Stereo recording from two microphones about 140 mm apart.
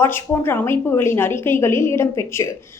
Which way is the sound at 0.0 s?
15° left (ahead or behind).